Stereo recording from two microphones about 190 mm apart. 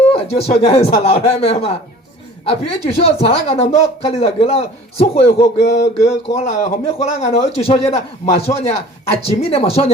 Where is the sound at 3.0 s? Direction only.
35° left (ahead or behind).